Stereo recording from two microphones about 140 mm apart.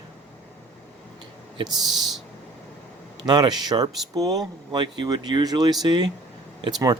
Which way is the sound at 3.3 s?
30° right (ahead or behind).